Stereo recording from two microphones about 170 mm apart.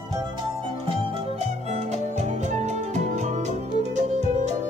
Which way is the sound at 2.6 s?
45° right (ahead or behind).